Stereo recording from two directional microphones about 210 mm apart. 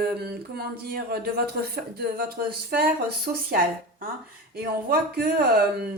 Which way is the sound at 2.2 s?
45° right (ahead or behind).